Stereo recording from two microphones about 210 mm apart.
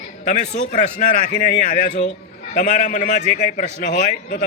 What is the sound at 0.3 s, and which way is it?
Speech, 35° left (ahead or behind).